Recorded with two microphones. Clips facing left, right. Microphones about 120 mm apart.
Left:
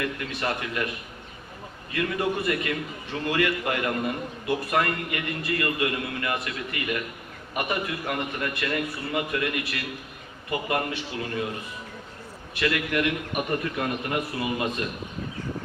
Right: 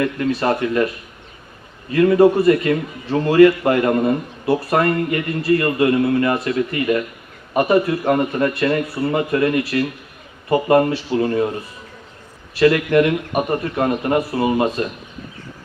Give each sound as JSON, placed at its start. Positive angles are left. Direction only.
{"t": 0.0, "sound": "a man's voice", "side_deg": -35}
{"t": 1.9, "sound": "a man's voice", "side_deg": -35}
{"t": 12.5, "sound": "a man's voice", "side_deg": -40}